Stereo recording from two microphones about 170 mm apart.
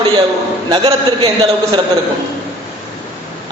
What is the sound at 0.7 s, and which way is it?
Speech, 25° right (ahead or behind).